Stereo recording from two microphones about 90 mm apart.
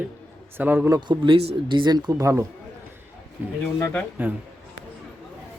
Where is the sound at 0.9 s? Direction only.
55° right (ahead or behind).